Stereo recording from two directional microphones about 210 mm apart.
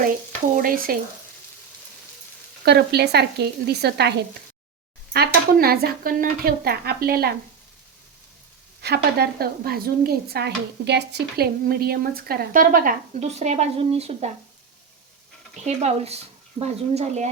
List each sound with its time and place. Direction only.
0.5 s a woman's voice: 40° right (ahead or behind)
2.6 s a woman's voice: 50° right (ahead or behind)
5.1 s a woman's voice: 45° right (ahead or behind)
8.8 s a woman's voice: 50° right (ahead or behind); by 14.3 s 30° right (ahead or behind)
15.6 s speech: 30° right (ahead or behind)